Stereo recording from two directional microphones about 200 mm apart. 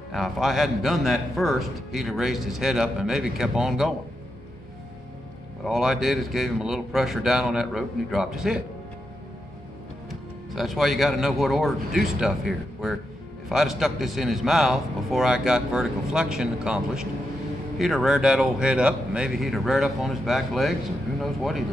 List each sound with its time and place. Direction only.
0.1 s speech: centre (ahead or behind)
5.7 s speech: centre (ahead or behind)
10.0 s speech: centre (ahead or behind)